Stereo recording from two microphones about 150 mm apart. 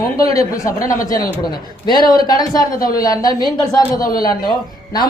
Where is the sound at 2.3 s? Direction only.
25° left (ahead or behind).